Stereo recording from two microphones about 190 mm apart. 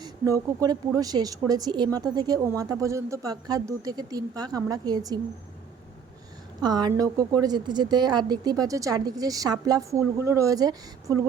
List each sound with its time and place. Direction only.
0.0 s a woman's voice: 20° right (ahead or behind)
6.6 s a woman's voice: 20° right (ahead or behind)